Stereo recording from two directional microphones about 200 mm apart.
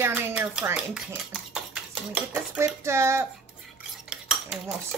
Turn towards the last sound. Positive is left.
turn(degrees=-5)  # may be behind; listen again after turning